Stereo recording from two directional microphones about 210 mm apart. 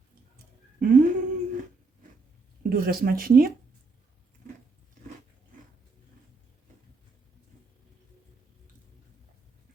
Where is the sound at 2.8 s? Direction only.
45° right (ahead or behind).